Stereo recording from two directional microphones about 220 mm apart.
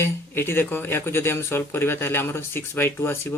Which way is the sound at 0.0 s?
10° left (ahead or behind).